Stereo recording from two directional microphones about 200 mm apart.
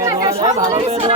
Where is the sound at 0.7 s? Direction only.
30° right (ahead or behind).